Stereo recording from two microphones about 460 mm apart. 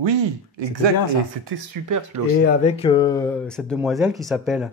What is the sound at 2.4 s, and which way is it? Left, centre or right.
Speech, centre.